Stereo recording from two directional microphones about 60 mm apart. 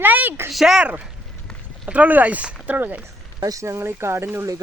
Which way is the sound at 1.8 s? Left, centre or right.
Right.